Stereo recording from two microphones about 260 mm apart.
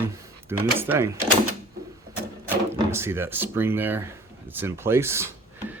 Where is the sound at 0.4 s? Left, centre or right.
Centre.